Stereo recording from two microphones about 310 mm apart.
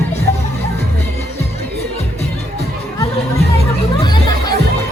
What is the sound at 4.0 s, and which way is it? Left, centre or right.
Music, centre.